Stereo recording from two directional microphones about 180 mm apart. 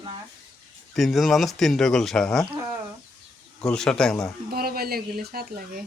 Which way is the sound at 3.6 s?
5° left (ahead or behind).